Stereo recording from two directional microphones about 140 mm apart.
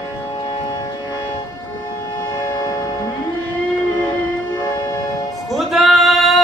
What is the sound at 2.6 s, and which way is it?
Music, 30° left (ahead or behind).